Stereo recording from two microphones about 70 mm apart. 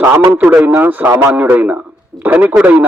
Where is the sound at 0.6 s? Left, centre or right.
Right.